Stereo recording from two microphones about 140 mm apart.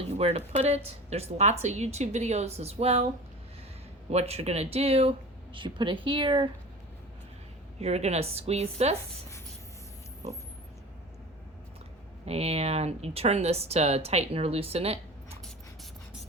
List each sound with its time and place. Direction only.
0.0 s speech: 45° right (ahead or behind)
4.1 s a woman's voice: 50° right (ahead or behind)
7.8 s speech: 50° right (ahead or behind)
12.2 s speech: 45° right (ahead or behind)